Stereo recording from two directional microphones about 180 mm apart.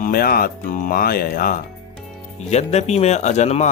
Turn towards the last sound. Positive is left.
turn(degrees=40)  # may be behind; listen again after turning